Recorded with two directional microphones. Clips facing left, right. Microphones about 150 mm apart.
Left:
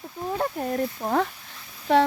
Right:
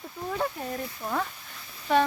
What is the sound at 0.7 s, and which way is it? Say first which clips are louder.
Speech: left 7 dB; 50° left (ahead or behind).